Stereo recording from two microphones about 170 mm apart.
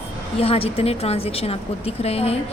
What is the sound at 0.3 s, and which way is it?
A woman's voice, 35° left (ahead or behind).